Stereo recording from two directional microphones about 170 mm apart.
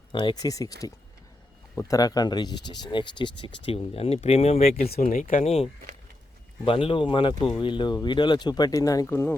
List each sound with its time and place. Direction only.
0.1 s speech: 25° left (ahead or behind)
1.7 s speech: 20° left (ahead or behind); by 4.9 s 35° left (ahead or behind)
5.0 s speech: 50° left (ahead or behind)
5.4 s speech: 40° left (ahead or behind)
6.7 s speech: 30° left (ahead or behind); by 9.3 s 15° left (ahead or behind)